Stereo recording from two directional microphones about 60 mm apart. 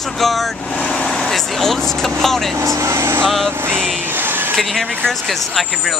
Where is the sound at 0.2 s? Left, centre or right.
Centre.